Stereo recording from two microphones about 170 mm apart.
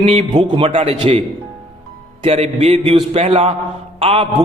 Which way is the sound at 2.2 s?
40° right (ahead or behind).